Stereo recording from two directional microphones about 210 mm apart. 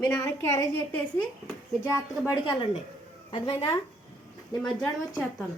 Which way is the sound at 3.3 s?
25° left (ahead or behind).